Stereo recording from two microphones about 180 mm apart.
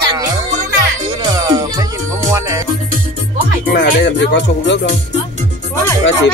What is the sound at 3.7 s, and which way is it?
Music, 65° left (ahead or behind).